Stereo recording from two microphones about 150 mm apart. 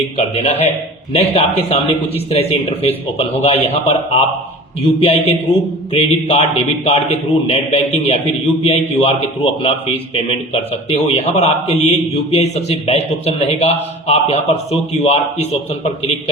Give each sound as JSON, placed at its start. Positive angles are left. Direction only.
{"t": 0.2, "sound": "a man's voice", "side_deg": 50}